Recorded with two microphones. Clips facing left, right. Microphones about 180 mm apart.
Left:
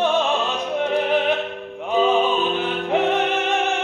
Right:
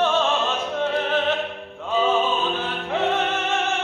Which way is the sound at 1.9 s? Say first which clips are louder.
Left 3 dB; 15° left (ahead or behind).